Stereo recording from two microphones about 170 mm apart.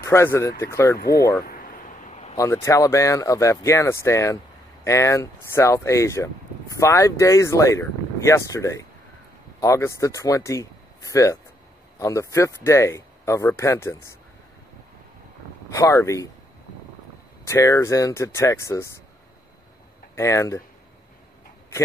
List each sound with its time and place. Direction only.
0.0 s speech: 15° left (ahead or behind)
0.9 s speech: 65° left (ahead or behind)
1.4 s a sound: 55° left (ahead or behind); by 2.3 s 40° left (ahead or behind)
2.3 s speech: 15° left (ahead or behind)
15.7 s speech: 20° left (ahead or behind)
17.5 s speech: 20° left (ahead or behind)
20.2 s speech: 15° left (ahead or behind)